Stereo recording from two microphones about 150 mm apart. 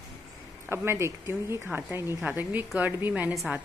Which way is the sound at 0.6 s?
15° right (ahead or behind).